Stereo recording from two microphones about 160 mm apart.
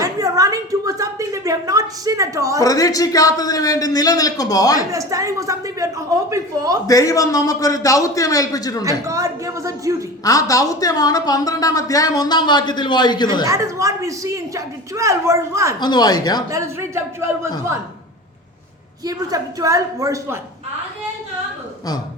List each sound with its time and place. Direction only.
0.0 s a sound: 20° right (ahead or behind)
2.6 s a woman's voice: 20° left (ahead or behind)
4.9 s a woman's voice: 20° right (ahead or behind)
6.8 s a woman's voice: 20° left (ahead or behind)
8.8 s a woman's voice: 20° right (ahead or behind)
10.2 s a woman's voice: 20° left (ahead or behind)
13.4 s a woman's voice: 20° right (ahead or behind)
15.8 s a woman's voice: 25° left (ahead or behind)
16.5 s a man's voice: 20° right (ahead or behind)
19.0 s a woman's voice: 20° right (ahead or behind)